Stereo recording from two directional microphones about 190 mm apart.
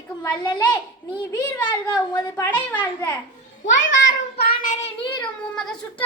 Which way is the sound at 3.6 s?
80° left.